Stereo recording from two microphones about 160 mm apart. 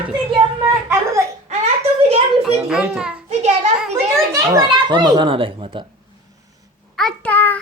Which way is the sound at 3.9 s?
20° right (ahead or behind).